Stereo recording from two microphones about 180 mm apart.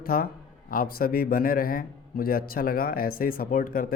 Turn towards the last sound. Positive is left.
turn(degrees=50)  # may be behind; listen again after turning